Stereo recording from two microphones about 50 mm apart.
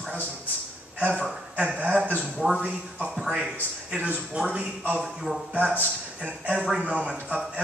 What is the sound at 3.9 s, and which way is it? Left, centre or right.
Speech, right.